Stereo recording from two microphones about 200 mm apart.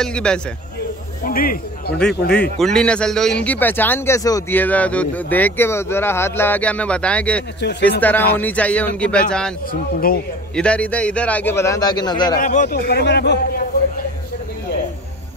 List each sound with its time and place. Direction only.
0.0 s speech: 5° left (ahead or behind)
1.2 s speech: 45° left (ahead or behind)
2.6 s a man's voice: 5° left (ahead or behind)
9.7 s speech: 45° left (ahead or behind)
10.5 s a man's voice: 5° left (ahead or behind)
12.4 s speech: 40° left (ahead or behind)
12.6 s speech: 50° left (ahead or behind)